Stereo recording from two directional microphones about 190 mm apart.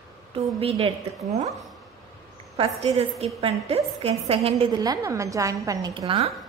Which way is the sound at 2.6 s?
30° right (ahead or behind).